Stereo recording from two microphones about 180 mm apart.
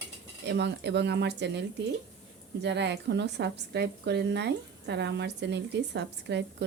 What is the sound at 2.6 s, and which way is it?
A woman's voice, 70° right (ahead or behind).